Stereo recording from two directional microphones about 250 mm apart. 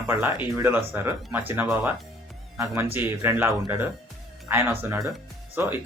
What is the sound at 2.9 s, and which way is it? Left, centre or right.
Speech, centre.